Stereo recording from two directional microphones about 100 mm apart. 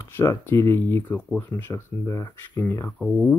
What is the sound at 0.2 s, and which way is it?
Speech, 25° left (ahead or behind).